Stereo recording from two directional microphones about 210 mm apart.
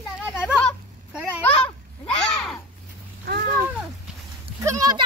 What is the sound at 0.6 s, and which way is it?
Speech, 5° left (ahead or behind).